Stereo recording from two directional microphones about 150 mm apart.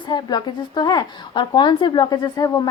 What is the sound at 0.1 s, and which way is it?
A woman's voice, 30° left (ahead or behind).